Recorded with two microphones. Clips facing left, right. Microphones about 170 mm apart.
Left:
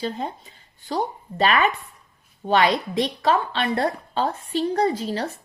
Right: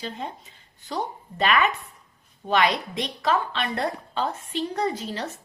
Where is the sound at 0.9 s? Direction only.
35° left (ahead or behind).